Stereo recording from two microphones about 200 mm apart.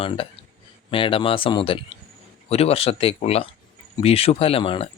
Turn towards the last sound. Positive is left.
turn(degrees=25)  # may be behind; listen again after turning